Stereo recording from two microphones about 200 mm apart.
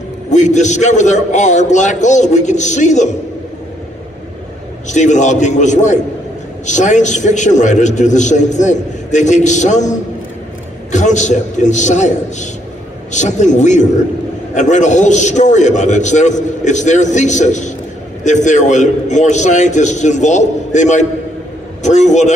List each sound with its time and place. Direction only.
0.3 s a man's voice: 35° left (ahead or behind)
4.8 s a man's voice: 35° left (ahead or behind)